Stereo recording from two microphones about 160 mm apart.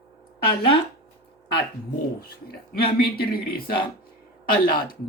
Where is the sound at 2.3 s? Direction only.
70° left (ahead or behind).